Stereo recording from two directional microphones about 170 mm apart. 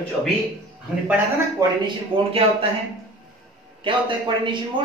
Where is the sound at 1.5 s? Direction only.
30° right (ahead or behind).